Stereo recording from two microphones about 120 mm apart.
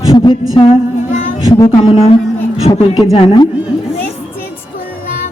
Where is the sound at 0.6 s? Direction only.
40° left (ahead or behind).